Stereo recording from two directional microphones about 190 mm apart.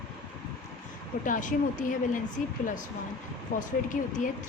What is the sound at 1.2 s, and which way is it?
A woman's voice, 45° left (ahead or behind).